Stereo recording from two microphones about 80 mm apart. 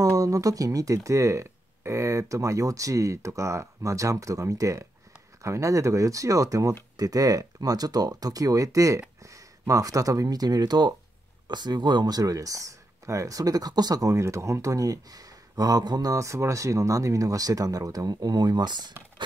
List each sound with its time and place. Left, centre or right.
0.0 s speech: right
16.1 s speech: right